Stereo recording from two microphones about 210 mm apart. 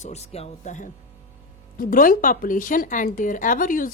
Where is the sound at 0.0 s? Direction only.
30° left (ahead or behind).